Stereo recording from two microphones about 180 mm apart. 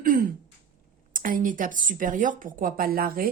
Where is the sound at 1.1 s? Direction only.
50° right (ahead or behind).